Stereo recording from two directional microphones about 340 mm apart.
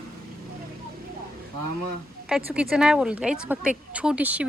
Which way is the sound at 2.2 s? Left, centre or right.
Centre.